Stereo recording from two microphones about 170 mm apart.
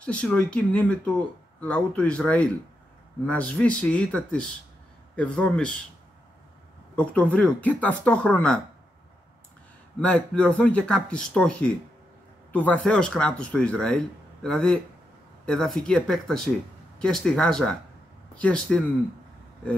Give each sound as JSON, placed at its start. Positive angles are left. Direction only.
{"t": 0.0, "sound": "speech", "side_deg": 5}
{"t": 7.0, "sound": "speech", "side_deg": 10}
{"t": 9.9, "sound": "speech", "side_deg": 5}